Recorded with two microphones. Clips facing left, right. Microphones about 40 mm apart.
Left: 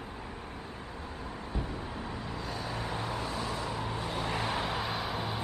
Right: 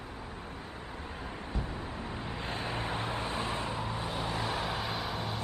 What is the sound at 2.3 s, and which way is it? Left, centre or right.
Vehicle, right.